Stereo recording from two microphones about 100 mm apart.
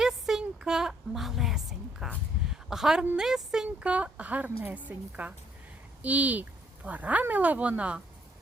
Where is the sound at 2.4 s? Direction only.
5° right (ahead or behind).